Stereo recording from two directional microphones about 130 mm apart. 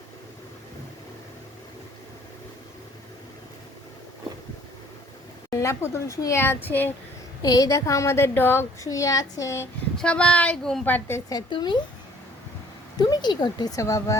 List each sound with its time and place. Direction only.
5.5 s a woman's voice: 20° left (ahead or behind)
7.4 s a woman's voice: 25° left (ahead or behind)
10.0 s speech: 10° left (ahead or behind)
10.8 s speech: 15° left (ahead or behind)
11.3 s speech: 35° left (ahead or behind)
13.0 s speech: 35° left (ahead or behind)